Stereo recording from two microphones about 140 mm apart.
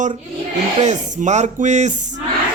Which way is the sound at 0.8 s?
55° right (ahead or behind).